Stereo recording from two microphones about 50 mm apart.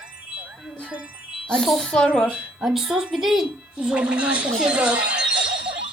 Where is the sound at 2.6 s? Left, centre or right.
Centre.